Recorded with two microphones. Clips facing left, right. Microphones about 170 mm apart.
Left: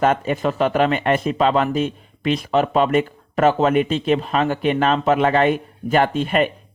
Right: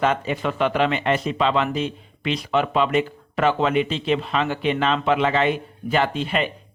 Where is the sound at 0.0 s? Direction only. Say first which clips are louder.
Left 4 dB; 45° left (ahead or behind).